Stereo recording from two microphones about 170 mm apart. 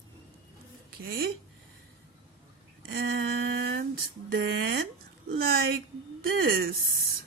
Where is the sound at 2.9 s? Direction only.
85° right.